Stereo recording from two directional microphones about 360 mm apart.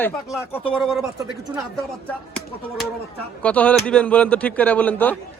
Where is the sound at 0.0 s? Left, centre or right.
Centre.